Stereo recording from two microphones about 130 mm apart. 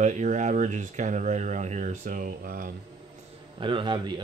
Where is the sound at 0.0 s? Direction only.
65° right (ahead or behind); by 2.7 s 90° right.